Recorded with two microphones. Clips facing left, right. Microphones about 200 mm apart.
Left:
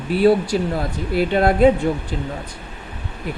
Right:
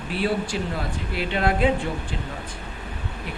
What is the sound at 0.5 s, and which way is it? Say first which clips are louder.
Speech: left 7 dB; 45° left (ahead or behind).